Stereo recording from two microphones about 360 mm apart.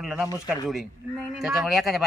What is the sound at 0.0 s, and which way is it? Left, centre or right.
Speech, centre.